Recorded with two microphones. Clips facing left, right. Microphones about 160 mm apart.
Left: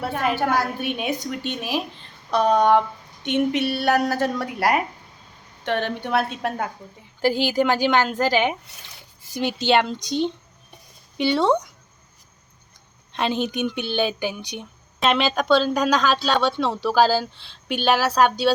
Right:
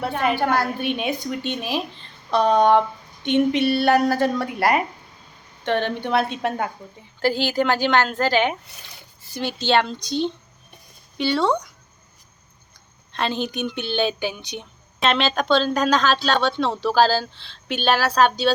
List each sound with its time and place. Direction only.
0.0 s a woman's voice: centre (ahead or behind)
7.2 s a woman's voice: 15° left (ahead or behind)
13.1 s a woman's voice: 15° left (ahead or behind)